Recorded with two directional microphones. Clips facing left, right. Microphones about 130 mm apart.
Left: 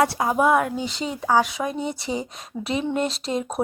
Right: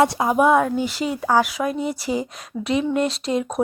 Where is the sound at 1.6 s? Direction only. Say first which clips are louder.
Right 3 dB; 30° left (ahead or behind).